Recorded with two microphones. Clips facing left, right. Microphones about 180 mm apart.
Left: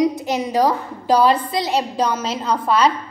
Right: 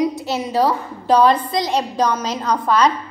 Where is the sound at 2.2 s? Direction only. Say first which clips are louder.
Right 1 dB; 30° left (ahead or behind).